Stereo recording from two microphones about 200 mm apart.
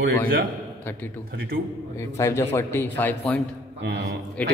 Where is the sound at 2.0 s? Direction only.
15° left (ahead or behind).